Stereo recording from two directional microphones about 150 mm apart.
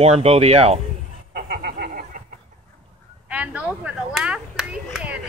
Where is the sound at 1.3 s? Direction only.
90° right.